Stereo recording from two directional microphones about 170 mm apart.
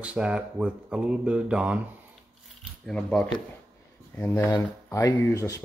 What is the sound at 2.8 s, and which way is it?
Speech, 5° left (ahead or behind).